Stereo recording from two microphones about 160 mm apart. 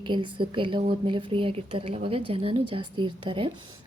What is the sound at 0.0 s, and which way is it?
A woman's voice, 30° right (ahead or behind).